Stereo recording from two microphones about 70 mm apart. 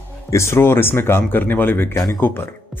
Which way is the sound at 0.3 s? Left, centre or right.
Left.